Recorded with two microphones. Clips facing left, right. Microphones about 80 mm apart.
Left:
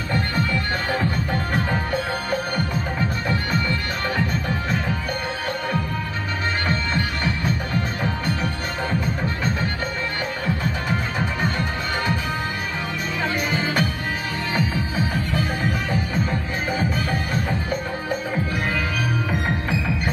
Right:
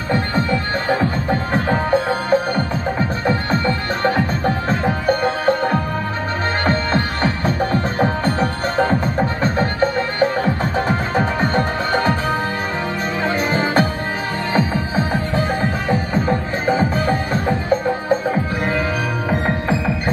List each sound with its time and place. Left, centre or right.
0.1 s music: right
13.2 s music: right
19.3 s music: right